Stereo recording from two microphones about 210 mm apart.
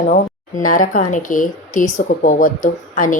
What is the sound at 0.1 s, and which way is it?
Speech, 40° left (ahead or behind).